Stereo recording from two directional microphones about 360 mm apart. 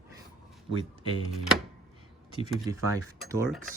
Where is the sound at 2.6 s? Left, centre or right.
Centre.